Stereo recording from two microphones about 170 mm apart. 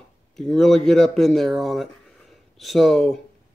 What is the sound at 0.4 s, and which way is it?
Speech, 5° left (ahead or behind).